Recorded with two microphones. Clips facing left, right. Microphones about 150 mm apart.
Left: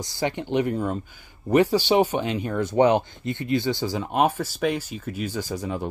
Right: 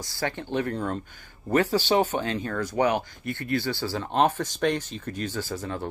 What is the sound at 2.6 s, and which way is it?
Speech, 25° left (ahead or behind).